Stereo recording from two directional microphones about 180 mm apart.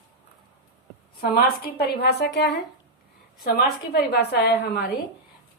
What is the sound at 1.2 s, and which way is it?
A woman's voice, 60° left (ahead or behind).